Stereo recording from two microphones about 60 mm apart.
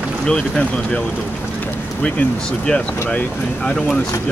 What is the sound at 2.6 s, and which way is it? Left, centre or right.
Speech, left.